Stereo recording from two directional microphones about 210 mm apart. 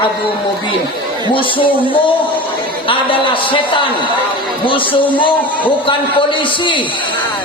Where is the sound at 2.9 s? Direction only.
25° left (ahead or behind).